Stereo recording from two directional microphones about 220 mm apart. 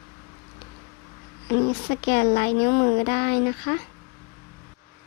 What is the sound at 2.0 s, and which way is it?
Speech, 40° left (ahead or behind).